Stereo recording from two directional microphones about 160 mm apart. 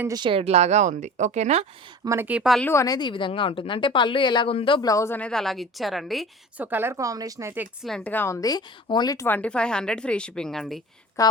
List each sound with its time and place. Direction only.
0.1 s speech: 30° right (ahead or behind)
2.0 s speech: 10° right (ahead or behind)
2.6 s a woman's voice: 20° left (ahead or behind); by 6.2 s centre (ahead or behind)
6.6 s speech: 10° right (ahead or behind)
7.9 s speech: 5° left (ahead or behind)
11.2 s a woman's voice: 20° left (ahead or behind)